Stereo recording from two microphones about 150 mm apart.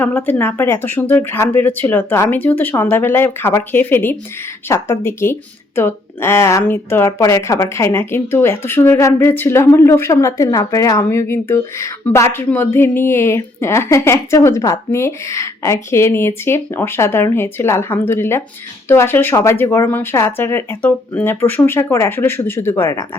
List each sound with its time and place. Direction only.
0.0 s a woman's voice: 15° left (ahead or behind)